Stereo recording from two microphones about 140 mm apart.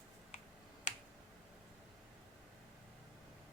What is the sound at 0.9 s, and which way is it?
Finger snapping, 60° left (ahead or behind).